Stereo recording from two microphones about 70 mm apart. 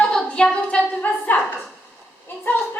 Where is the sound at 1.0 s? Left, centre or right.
Left.